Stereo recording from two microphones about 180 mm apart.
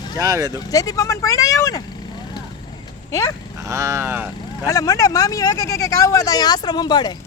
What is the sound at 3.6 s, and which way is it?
Speech, 15° right (ahead or behind).